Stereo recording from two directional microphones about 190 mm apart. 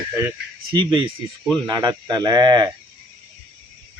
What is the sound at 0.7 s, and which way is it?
Speech, 25° right (ahead or behind).